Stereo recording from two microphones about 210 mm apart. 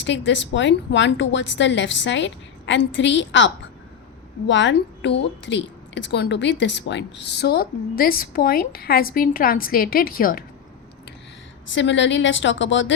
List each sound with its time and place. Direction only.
0.0 s a woman's voice: 60° left (ahead or behind); by 10.4 s 45° left (ahead or behind)
11.7 s a woman's voice: 60° left (ahead or behind)